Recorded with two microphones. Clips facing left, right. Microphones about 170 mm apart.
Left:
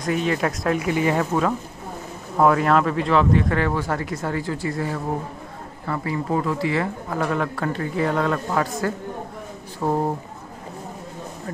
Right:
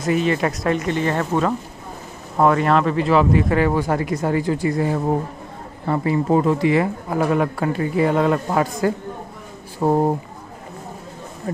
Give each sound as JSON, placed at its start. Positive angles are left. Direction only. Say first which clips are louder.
{"t": 0.0, "sound": "speech", "louder": "right 3 dB", "side_deg": 0}